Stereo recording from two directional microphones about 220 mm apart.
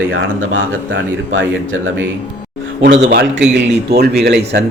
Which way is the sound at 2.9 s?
50° right (ahead or behind).